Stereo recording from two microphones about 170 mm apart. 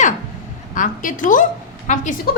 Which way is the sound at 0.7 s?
50° left (ahead or behind).